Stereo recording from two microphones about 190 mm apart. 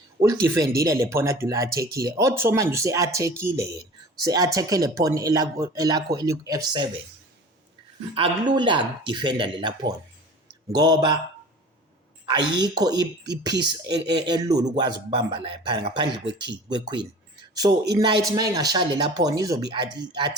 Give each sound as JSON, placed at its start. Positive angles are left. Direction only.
{"t": 0.2, "sound": "speech", "side_deg": -20}
{"t": 8.1, "sound": "speech", "side_deg": -25}
{"t": 12.2, "sound": "speech", "side_deg": -25}